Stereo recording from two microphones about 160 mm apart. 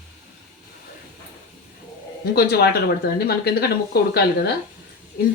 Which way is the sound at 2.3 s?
80° left.